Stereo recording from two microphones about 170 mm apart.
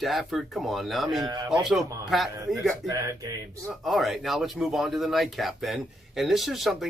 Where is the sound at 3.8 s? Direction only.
Centre (ahead or behind).